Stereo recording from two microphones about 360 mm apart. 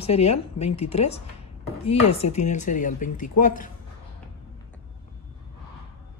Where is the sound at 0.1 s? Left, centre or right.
Left.